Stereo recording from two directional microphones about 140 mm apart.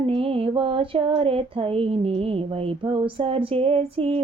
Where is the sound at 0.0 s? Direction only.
40° right (ahead or behind).